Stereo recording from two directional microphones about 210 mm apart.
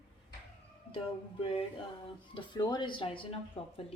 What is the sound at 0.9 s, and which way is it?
Speech, 25° left (ahead or behind).